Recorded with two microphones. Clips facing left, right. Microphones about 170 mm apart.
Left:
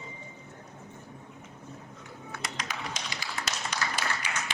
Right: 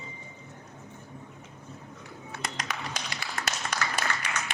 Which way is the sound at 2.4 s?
55° right (ahead or behind).